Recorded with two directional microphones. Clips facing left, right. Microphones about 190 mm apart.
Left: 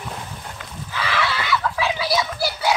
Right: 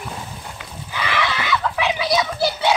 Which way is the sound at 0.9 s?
15° right (ahead or behind).